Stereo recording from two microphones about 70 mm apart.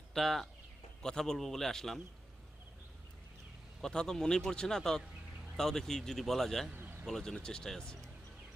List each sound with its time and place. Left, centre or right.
0.1 s speech: centre
3.8 s speech: centre
6.7 s a sound: right
7.1 s speech: centre